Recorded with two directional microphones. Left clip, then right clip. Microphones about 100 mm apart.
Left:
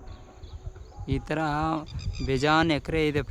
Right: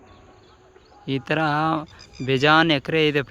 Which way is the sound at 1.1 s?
30° right (ahead or behind).